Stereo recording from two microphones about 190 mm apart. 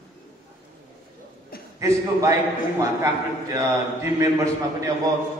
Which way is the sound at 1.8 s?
15° right (ahead or behind).